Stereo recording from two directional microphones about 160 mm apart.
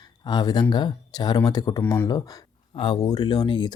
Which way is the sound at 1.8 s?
10° left (ahead or behind).